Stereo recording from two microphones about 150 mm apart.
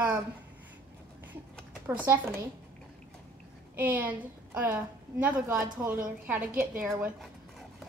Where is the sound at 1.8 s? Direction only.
15° right (ahead or behind).